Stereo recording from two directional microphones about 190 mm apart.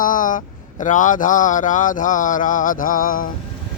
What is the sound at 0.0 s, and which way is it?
Speech, 45° left (ahead or behind).